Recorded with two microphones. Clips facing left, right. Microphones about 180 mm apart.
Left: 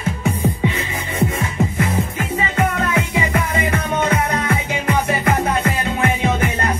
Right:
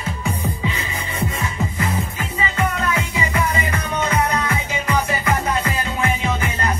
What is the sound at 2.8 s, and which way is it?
Music, 55° left (ahead or behind).